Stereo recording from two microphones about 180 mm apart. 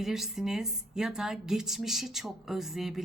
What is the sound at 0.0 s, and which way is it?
Speech, centre (ahead or behind).